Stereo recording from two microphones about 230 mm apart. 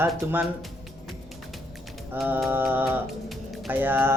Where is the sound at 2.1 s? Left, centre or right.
Centre.